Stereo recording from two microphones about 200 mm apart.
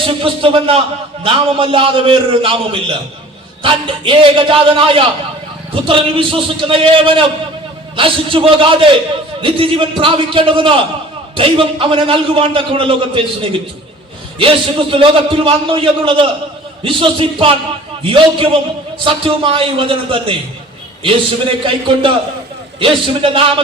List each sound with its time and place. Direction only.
0.0 s a man's voice: 25° right (ahead or behind)